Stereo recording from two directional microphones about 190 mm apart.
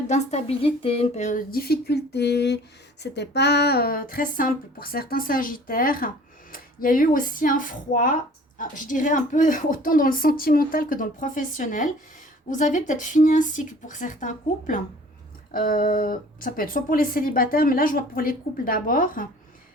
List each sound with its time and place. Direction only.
0.1 s speech: 35° left (ahead or behind)